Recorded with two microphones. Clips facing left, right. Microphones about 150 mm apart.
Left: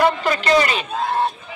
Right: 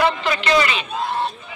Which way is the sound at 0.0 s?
45° left (ahead or behind).